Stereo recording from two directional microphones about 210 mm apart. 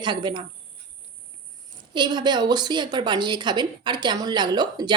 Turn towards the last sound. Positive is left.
turn(degrees=-20)  # may be behind; listen again after turning